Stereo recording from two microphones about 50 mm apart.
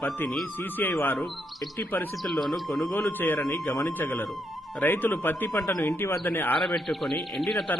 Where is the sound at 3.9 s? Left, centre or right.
Left.